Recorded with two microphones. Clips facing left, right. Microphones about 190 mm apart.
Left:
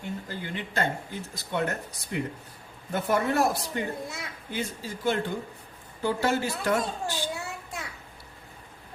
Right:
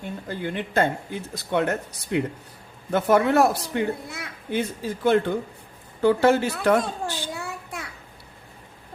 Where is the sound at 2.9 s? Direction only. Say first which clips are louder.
Right 6 dB; 70° right (ahead or behind).